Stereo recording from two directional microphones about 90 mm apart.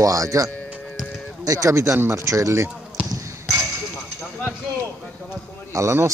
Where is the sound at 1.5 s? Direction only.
35° right (ahead or behind).